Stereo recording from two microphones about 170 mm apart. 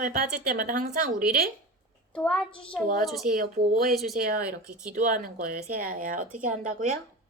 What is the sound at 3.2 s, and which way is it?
Speech, 60° right (ahead or behind).